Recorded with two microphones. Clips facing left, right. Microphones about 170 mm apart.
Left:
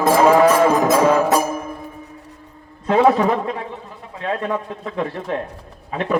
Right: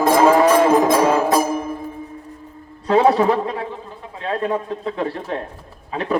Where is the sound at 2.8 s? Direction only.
35° right (ahead or behind).